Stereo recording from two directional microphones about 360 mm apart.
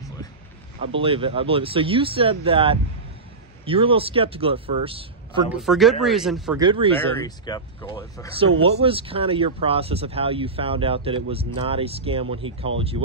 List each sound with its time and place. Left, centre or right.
0.9 s speech: centre
5.5 s speech: centre
6.6 s speech: centre
7.2 s speech: centre
8.4 s speech: centre